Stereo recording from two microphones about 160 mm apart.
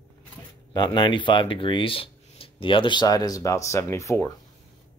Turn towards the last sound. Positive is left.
turn(degrees=15)  # may be behind; listen again after turning